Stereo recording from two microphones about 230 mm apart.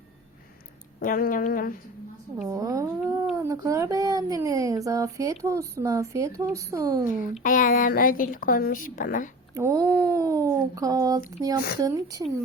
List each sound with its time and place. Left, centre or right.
0.9 s a woman's voice: left
2.5 s speech: centre
7.4 s a woman's voice: left
9.6 s a sound: centre
11.3 s speech: centre